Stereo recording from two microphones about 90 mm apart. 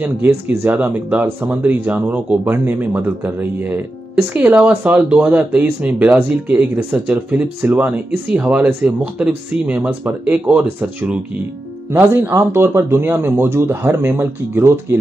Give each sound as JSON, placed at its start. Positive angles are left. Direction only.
{"t": 0.0, "sound": "speech", "side_deg": -20}
{"t": 12.0, "sound": "speech", "side_deg": -30}